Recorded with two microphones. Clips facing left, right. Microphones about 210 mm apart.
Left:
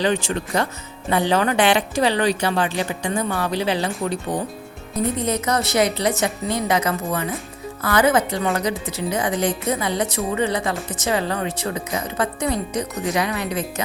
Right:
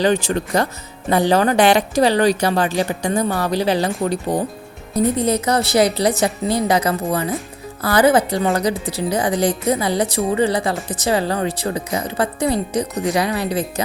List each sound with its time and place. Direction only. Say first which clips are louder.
0.0 s a woman's voice: right 4 dB; 40° right (ahead or behind)